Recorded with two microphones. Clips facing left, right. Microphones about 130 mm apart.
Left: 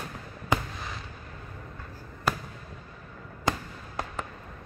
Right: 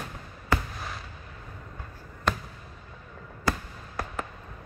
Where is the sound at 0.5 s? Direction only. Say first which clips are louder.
Even; 20° left (ahead or behind).